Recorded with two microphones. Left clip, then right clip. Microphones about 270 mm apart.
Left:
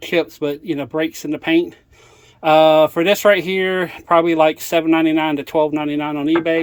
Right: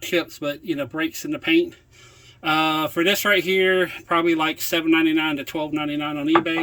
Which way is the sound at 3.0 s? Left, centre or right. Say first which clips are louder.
Left 5 dB; left.